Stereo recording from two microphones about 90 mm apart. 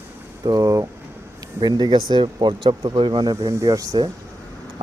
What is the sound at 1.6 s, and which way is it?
Speech, 50° right (ahead or behind).